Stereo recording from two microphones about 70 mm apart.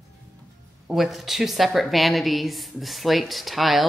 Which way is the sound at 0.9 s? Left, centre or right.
Centre.